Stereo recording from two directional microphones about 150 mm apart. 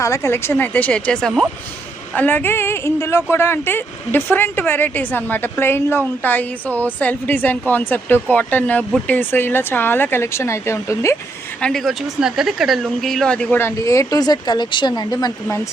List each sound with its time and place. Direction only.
0.0 s speech: 20° left (ahead or behind)
11.6 s speech: centre (ahead or behind); by 15.6 s 25° left (ahead or behind)